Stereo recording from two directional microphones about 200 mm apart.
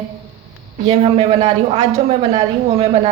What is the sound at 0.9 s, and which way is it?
Speech, 30° right (ahead or behind).